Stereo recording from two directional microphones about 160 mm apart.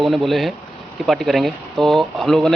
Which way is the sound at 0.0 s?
Centre (ahead or behind).